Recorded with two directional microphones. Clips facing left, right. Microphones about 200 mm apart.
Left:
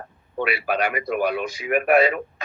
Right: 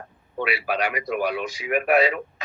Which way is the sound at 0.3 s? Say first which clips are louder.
Left 2 dB; 50° left (ahead or behind).